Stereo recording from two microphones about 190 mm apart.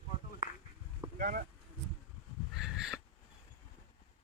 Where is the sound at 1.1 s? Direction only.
50° right (ahead or behind).